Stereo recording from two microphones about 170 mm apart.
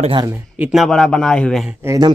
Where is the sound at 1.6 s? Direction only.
15° right (ahead or behind).